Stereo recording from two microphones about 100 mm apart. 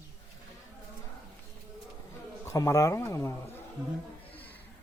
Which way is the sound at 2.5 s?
35° left (ahead or behind).